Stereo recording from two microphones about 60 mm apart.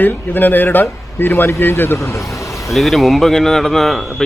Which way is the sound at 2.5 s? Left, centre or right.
Centre.